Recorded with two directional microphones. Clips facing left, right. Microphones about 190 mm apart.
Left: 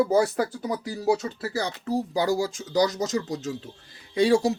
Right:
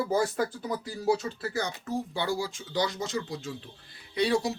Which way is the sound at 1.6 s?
35° left (ahead or behind).